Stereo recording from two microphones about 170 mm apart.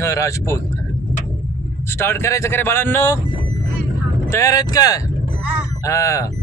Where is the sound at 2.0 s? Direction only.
15° left (ahead or behind).